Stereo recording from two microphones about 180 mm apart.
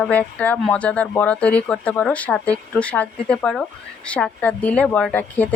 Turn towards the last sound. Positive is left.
turn(degrees=10)  # may be behind; listen again after turning